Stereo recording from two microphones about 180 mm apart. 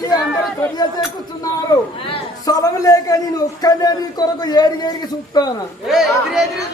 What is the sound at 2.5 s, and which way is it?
A man's voice, 20° left (ahead or behind).